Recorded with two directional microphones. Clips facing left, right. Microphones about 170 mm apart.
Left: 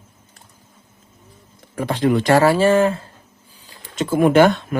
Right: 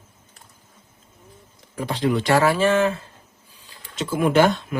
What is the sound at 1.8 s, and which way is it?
Speech, 55° left (ahead or behind).